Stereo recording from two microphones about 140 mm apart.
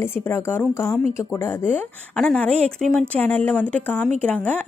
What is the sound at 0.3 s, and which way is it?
Speech, 20° left (ahead or behind).